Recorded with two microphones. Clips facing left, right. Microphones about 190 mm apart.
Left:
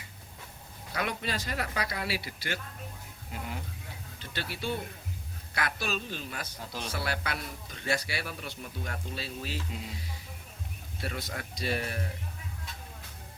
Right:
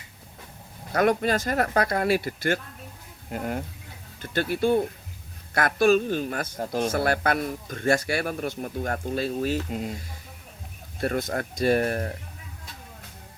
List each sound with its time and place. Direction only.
0.9 s a man's voice: 50° right (ahead or behind)
11.0 s a man's voice: 50° right (ahead or behind)